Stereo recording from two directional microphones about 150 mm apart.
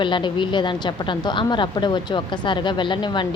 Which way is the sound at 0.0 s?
30° left (ahead or behind).